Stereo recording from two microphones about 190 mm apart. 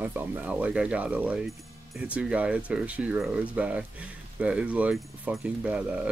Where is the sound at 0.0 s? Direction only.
10° right (ahead or behind).